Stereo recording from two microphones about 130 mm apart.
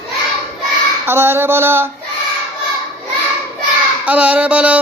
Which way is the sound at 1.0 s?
20° right (ahead or behind).